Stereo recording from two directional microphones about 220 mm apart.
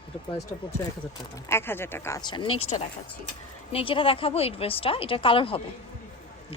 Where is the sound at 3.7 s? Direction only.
25° left (ahead or behind).